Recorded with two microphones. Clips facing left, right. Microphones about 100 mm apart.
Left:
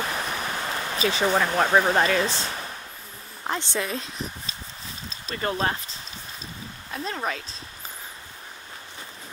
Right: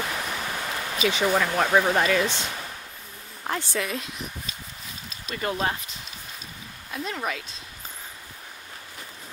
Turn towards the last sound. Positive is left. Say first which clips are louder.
# left 1 dB
turn(degrees=35)  # may be behind; listen again after turning